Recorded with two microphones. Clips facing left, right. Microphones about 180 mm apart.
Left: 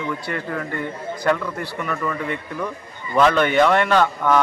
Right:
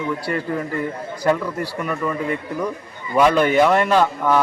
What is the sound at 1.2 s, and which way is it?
Speech, 10° right (ahead or behind).